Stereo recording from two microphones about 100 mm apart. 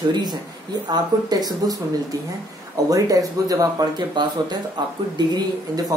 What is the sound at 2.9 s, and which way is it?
A woman's voice, 35° right (ahead or behind).